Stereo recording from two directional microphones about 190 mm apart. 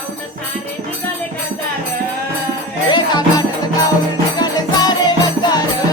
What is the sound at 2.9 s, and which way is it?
Music, 20° left (ahead or behind).